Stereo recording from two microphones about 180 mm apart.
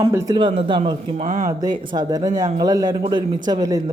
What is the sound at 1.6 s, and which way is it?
Speech, 20° right (ahead or behind).